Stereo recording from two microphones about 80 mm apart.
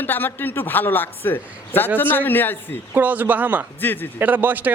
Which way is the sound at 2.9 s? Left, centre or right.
Right.